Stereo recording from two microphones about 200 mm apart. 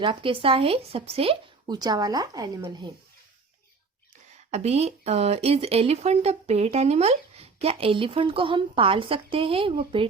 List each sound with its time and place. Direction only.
0.0 s speech: 25° right (ahead or behind)
4.5 s speech: 30° right (ahead or behind)